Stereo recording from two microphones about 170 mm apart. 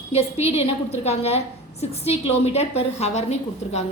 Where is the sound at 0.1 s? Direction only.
35° left (ahead or behind).